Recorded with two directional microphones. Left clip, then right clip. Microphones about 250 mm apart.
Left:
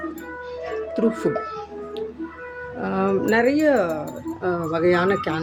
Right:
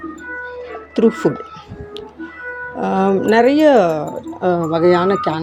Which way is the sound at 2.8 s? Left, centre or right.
Right.